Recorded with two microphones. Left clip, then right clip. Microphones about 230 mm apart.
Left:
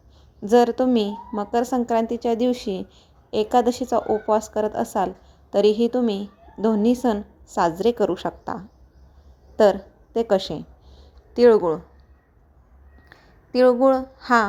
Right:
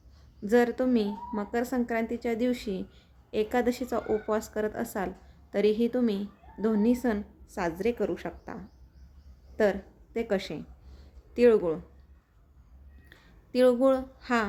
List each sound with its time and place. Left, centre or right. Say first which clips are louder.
0.4 s a woman's voice: left 7 dB; centre
10.5 s a sound: left 7 dB; centre
13.6 s speech: left 6 dB; centre
14.2 s a woman's voice: left 10 dB; centre